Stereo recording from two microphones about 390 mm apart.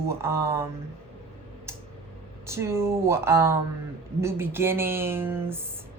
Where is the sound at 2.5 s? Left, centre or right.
Centre.